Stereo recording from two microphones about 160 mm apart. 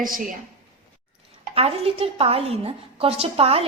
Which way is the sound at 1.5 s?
35° right (ahead or behind).